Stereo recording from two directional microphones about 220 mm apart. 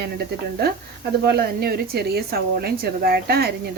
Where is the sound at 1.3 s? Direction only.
45° right (ahead or behind).